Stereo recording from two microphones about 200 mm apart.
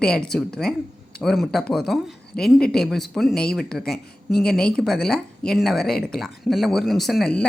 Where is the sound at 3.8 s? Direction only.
50° left (ahead or behind).